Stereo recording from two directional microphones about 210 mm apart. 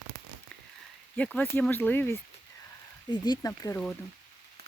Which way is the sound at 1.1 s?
5° left (ahead or behind).